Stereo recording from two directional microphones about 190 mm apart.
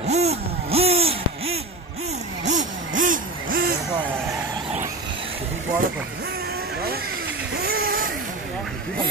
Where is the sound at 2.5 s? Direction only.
40° right (ahead or behind).